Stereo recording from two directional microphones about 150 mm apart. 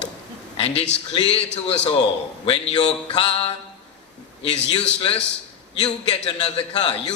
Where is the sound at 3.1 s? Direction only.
40° left (ahead or behind).